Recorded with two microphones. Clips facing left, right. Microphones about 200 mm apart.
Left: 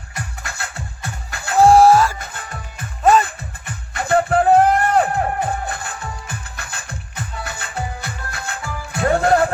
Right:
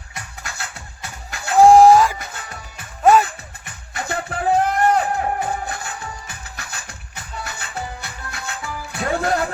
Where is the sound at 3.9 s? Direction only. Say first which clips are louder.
Left 9 dB; 55° left (ahead or behind).